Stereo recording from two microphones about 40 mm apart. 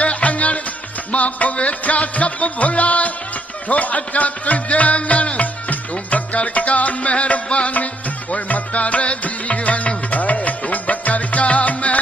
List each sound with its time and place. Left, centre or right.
0.0 s music: left